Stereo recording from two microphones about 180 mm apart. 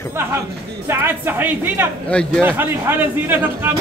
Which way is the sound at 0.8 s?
10° right (ahead or behind).